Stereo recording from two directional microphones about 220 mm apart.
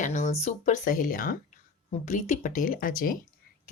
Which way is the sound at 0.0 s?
35° left (ahead or behind).